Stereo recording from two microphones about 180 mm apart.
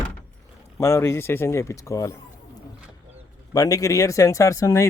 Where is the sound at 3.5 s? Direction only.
20° left (ahead or behind).